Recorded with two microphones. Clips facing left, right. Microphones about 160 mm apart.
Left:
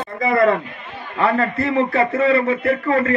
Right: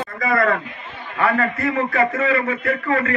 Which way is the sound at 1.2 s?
30° left (ahead or behind).